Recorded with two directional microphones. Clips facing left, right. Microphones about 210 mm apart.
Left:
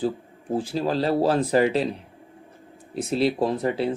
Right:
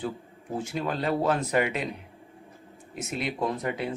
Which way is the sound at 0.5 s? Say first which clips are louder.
Left 6 dB; 30° left (ahead or behind).